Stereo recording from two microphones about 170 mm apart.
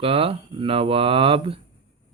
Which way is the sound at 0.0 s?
35° right (ahead or behind).